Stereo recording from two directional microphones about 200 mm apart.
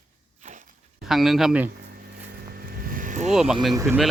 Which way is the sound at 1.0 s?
Centre (ahead or behind).